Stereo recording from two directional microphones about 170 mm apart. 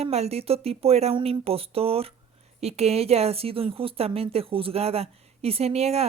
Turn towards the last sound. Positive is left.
turn(degrees=-40)  # may be behind; listen again after turning